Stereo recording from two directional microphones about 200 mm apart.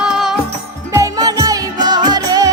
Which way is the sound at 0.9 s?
15° right (ahead or behind).